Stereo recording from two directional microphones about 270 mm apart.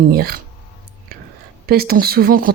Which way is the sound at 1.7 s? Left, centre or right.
Right.